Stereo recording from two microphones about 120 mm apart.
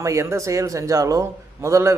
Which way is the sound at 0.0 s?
25° right (ahead or behind).